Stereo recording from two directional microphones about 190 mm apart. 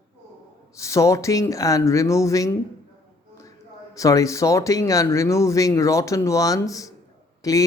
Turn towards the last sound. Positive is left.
turn(degrees=20)  # may be behind; listen again after turning